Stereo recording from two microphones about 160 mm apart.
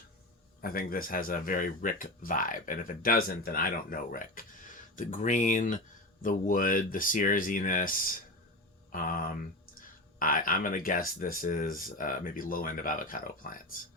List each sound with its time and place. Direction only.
0.6 s speech: 65° left (ahead or behind)